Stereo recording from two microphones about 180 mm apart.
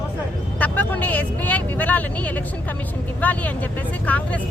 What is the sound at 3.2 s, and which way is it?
Speech, 10° left (ahead or behind).